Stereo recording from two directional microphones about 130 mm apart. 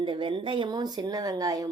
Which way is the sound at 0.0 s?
40° right (ahead or behind).